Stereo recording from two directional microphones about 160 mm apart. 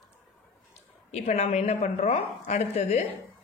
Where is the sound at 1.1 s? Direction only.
40° left (ahead or behind).